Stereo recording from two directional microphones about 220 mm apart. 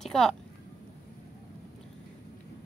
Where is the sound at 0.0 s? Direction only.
Centre (ahead or behind).